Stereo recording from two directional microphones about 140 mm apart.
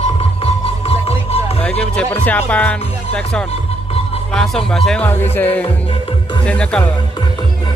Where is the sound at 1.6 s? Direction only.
10° left (ahead or behind).